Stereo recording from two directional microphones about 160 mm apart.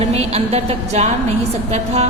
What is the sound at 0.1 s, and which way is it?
A woman's voice, 40° right (ahead or behind).